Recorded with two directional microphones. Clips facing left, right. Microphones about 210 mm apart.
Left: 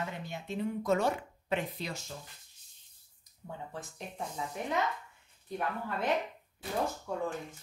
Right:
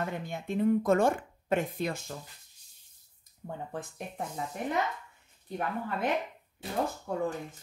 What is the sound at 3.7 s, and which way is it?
Speech, 55° right (ahead or behind).